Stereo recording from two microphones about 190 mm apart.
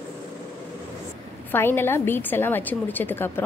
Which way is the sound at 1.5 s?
10° left (ahead or behind).